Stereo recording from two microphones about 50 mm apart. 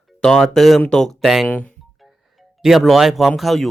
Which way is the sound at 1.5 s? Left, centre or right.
Left.